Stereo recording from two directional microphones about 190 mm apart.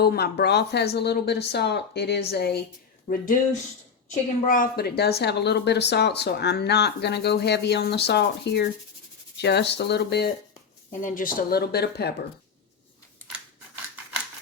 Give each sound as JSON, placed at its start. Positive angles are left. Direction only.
{"t": 0.0, "sound": "a woman's voice", "side_deg": 55}
{"t": 3.1, "sound": "a woman's voice", "side_deg": 45}
{"t": 11.0, "sound": "a woman's voice", "side_deg": 45}